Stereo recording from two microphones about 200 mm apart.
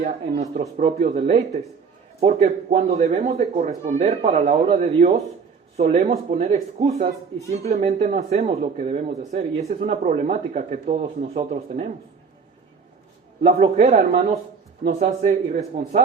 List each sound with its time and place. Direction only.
0.8 s speech: 35° right (ahead or behind)
13.4 s speech: 30° right (ahead or behind)